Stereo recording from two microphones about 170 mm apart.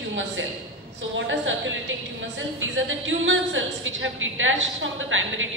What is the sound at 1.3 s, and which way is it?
A capella, 90° right.